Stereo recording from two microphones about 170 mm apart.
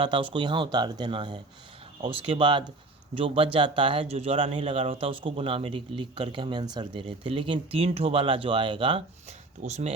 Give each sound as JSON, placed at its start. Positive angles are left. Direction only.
{"t": 0.0, "sound": "speech", "side_deg": -30}
{"t": 9.6, "sound": "speech", "side_deg": -40}